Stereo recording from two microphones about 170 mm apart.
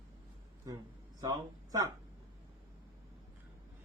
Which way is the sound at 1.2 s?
20° right (ahead or behind).